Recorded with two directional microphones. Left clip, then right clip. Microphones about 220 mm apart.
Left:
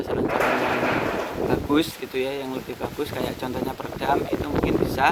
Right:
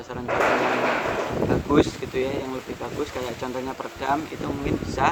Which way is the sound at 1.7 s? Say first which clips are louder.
Right 2 dB; 40° left (ahead or behind).